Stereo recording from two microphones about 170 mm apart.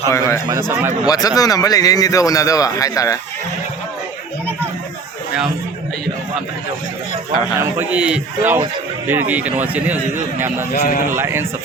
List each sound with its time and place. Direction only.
0.1 s a man's voice: 20° left (ahead or behind)
0.7 s a man's voice: 15° right (ahead or behind)
1.0 s a man's voice: 20° left (ahead or behind)
7.5 s a man's voice: 15° right (ahead or behind)
10.7 s a man's voice: 55° left (ahead or behind)
11.1 s a man's voice: 15° right (ahead or behind)